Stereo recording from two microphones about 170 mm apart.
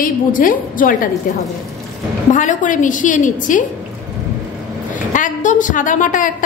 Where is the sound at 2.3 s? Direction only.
50° left (ahead or behind).